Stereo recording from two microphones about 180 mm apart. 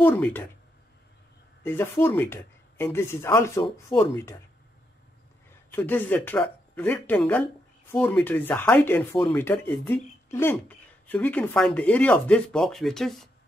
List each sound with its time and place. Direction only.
0.0 s speech: 10° left (ahead or behind)
1.6 s speech: 15° left (ahead or behind)
5.7 s speech: 10° left (ahead or behind)